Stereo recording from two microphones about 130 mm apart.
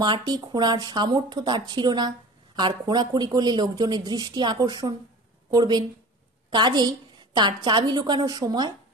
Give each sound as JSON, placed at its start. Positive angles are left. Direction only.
{"t": 0.0, "sound": "speech", "side_deg": -30}